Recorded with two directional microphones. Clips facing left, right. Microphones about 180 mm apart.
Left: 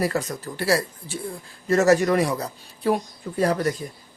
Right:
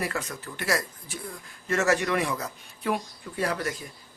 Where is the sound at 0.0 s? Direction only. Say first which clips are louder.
Left 7 dB; 40° left (ahead or behind).